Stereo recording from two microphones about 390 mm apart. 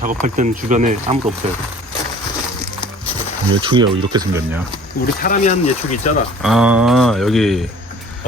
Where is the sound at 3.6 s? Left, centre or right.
Centre.